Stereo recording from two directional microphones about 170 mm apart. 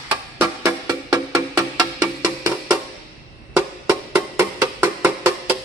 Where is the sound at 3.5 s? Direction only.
10° right (ahead or behind).